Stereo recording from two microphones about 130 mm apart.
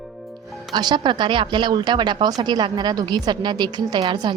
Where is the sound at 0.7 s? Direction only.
35° right (ahead or behind).